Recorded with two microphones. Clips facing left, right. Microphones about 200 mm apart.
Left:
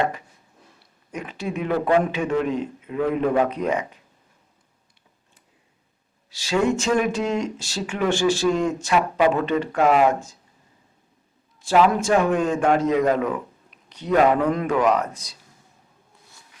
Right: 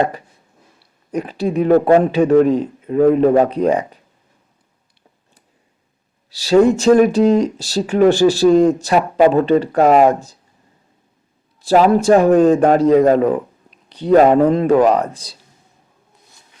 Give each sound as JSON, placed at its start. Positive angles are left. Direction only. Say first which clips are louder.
{"t": 1.1, "sound": "speech", "louder": "right 10 dB", "side_deg": -35}
{"t": 6.3, "sound": "speech", "louder": "right 9 dB", "side_deg": -35}
{"t": 11.6, "sound": "speech", "louder": "right 6 dB", "side_deg": -35}